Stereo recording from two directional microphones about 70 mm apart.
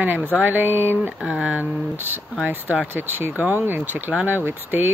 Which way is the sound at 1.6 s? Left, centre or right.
Right.